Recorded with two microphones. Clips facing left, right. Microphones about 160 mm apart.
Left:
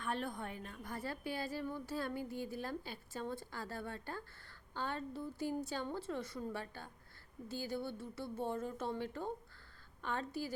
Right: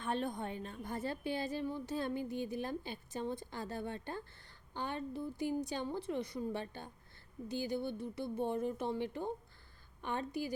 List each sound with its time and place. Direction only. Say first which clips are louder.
0.0 s a woman's voice: right 3 dB; 20° right (ahead or behind)